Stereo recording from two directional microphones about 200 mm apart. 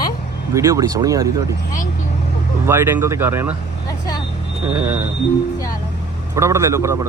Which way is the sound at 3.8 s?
20° left (ahead or behind).